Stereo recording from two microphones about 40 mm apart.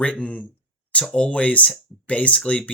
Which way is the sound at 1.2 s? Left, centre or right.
Left.